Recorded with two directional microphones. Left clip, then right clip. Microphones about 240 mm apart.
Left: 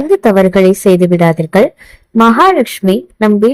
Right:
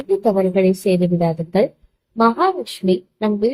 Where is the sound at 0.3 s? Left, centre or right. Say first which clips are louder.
Left 8 dB; left.